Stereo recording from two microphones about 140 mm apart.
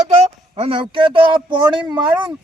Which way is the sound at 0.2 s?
45° right (ahead or behind).